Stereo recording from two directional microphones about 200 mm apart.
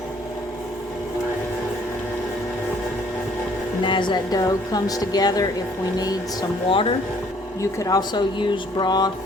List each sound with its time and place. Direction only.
3.8 s a woman's voice: 25° left (ahead or behind)
6.7 s a woman's voice: 25° left (ahead or behind)